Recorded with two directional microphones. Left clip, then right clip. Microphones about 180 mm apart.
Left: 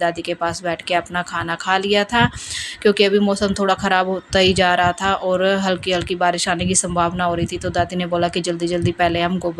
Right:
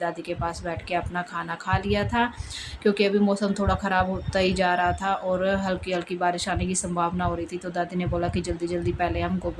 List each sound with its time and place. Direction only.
0.0 s speech: 30° left (ahead or behind)